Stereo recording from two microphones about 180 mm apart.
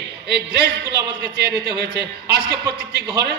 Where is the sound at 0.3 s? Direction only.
65° right (ahead or behind).